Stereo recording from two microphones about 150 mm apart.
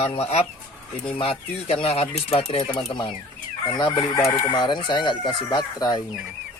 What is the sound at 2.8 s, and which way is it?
Speech, 30° left (ahead or behind).